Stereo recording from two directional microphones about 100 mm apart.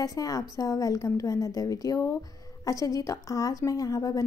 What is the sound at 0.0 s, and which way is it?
A woman's voice, 35° left (ahead or behind).